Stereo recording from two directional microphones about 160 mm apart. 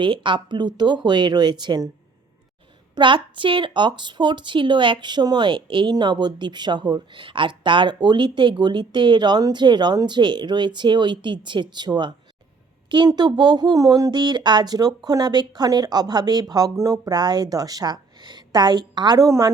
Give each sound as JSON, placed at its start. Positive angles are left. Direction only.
{"t": 0.0, "sound": "speech", "side_deg": -30}
{"t": 2.9, "sound": "speech", "side_deg": -30}